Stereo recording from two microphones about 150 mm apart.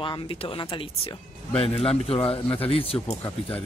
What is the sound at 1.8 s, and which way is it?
Speech, 40° left (ahead or behind).